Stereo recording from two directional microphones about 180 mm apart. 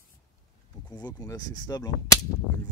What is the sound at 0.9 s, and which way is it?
Speech, 20° left (ahead or behind).